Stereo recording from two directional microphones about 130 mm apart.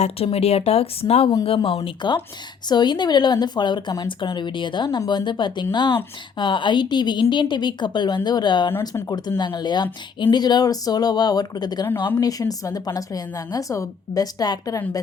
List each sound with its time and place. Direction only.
0.0 s a woman's voice: 50° left (ahead or behind); by 14.8 s 30° left (ahead or behind)